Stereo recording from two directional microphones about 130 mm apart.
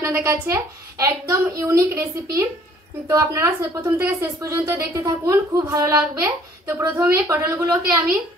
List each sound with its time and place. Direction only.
0.0 s a woman's voice: 20° right (ahead or behind)
5.9 s a woman's voice: 15° right (ahead or behind)